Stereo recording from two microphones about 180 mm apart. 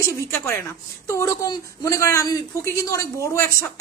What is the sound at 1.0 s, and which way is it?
A woman's voice, 20° left (ahead or behind).